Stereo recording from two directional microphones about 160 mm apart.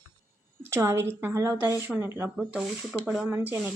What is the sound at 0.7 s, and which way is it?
Speech, 15° right (ahead or behind).